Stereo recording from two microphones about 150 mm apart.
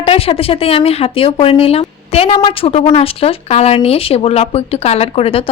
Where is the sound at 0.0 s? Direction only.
40° left (ahead or behind).